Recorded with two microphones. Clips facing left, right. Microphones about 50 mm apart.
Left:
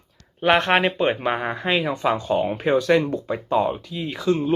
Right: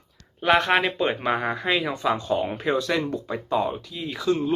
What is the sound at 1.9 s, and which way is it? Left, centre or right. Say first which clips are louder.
Speech: left 2 dB; left.